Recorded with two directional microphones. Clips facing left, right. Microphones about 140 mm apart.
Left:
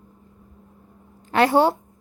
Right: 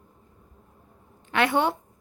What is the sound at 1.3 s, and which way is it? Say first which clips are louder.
Speech: left 6 dB; 35° left (ahead or behind).